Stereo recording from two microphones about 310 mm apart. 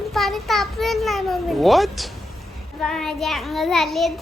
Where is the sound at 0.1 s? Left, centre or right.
Centre.